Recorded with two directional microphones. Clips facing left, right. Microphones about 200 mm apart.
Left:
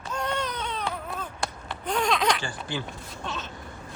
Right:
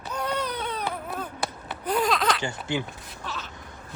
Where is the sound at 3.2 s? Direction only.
20° left (ahead or behind).